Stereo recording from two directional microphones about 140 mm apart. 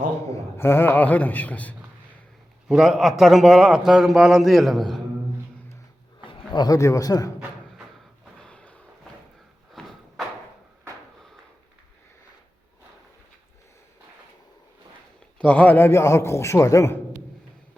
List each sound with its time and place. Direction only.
0.3 s a man's voice: 15° left (ahead or behind)
2.6 s a man's voice: centre (ahead or behind)
6.5 s a man's voice: 30° left (ahead or behind)
8.4 s a sound: 5° left (ahead or behind)
9.8 s a sound: 5° left (ahead or behind)
15.4 s a man's voice: 10° left (ahead or behind)